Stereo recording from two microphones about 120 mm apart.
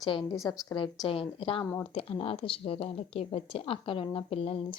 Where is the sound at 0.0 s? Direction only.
45° left (ahead or behind).